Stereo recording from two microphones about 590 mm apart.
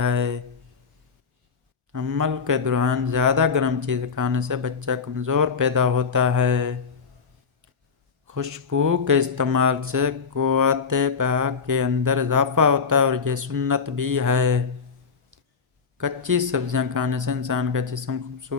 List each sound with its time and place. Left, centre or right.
0.0 s a sound: right
1.9 s speech: right
8.3 s speech: right
16.0 s speech: right